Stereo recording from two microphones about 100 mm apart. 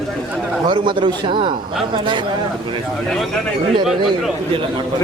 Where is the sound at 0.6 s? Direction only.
55° right (ahead or behind).